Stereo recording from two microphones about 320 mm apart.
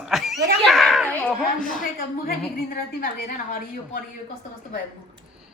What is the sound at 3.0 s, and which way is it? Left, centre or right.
Speech, left.